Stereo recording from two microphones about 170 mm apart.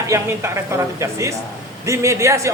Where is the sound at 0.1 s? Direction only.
15° right (ahead or behind).